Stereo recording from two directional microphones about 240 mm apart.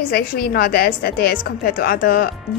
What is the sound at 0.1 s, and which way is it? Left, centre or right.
A woman's voice, left.